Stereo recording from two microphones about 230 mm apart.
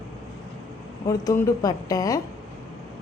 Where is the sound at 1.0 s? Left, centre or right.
Centre.